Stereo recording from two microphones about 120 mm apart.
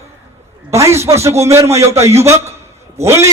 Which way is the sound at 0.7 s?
25° right (ahead or behind).